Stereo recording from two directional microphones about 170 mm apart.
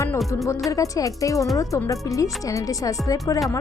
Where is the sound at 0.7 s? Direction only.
20° left (ahead or behind).